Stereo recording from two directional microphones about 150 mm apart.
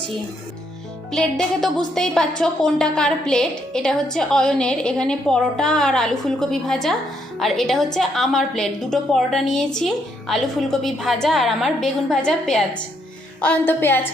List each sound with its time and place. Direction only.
1.1 s a woman's voice: 5° left (ahead or behind)